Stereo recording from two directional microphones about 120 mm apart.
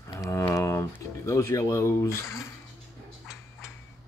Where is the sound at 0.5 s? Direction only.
25° left (ahead or behind).